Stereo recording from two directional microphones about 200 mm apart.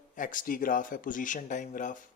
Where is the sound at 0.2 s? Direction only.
40° left (ahead or behind).